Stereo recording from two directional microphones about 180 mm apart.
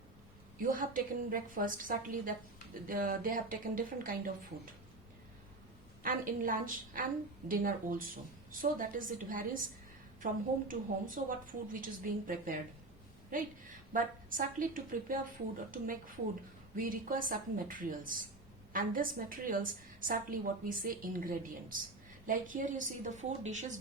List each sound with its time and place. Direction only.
0.6 s a woman's voice: 50° right (ahead or behind)
6.0 s a woman's voice: 50° right (ahead or behind)